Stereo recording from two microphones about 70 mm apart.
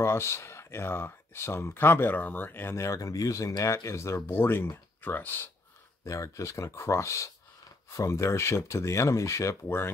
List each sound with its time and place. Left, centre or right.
0.0 s speech: left
2.7 s speech: left
6.0 s speech: left
9.7 s speech: left